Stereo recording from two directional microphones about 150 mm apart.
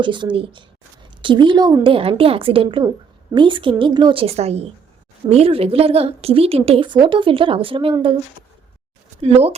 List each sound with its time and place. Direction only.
0.0 s a woman's voice: 30° right (ahead or behind)
9.2 s speech: 40° right (ahead or behind)